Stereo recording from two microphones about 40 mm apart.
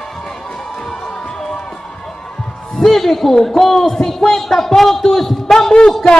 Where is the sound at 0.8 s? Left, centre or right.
Centre.